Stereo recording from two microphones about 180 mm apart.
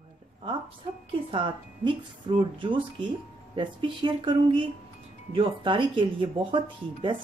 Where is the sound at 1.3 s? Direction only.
30° right (ahead or behind).